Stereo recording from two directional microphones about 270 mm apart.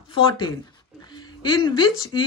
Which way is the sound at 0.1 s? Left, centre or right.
Centre.